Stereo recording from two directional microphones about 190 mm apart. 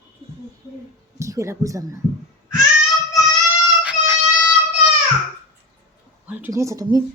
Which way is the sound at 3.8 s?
5° right (ahead or behind).